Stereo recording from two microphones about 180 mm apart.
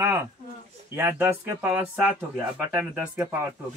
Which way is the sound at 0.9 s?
10° right (ahead or behind).